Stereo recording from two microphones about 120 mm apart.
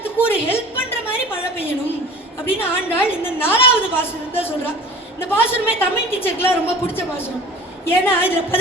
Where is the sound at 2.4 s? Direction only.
20° left (ahead or behind).